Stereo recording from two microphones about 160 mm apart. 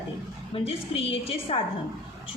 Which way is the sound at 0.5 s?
35° left (ahead or behind).